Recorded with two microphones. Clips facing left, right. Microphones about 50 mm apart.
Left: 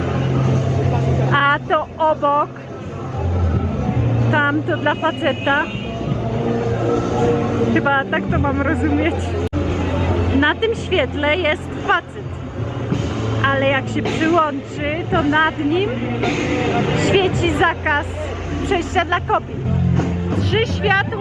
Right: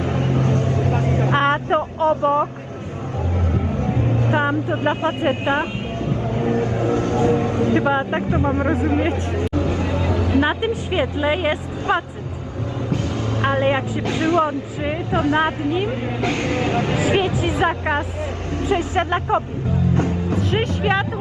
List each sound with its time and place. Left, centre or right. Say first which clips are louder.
0.0 s vehicle: left 1 dB; left
0.5 s vehicle: left 1 dB; right
1.4 s vehicle: left 3 dB; left
3.5 s music: even; right
3.9 s music: even; left
4.4 s speech: left 5 dB; left
6.2 s vehicle: left 1 dB; right
7.2 s speech: left 1 dB; left
9.6 s music: left 1 dB; left
10.9 s speech: left 2 dB; left
13.4 s speech: left 2 dB; left
20.3 s speech: left 3 dB; left
20.8 s speech: left 4 dB; left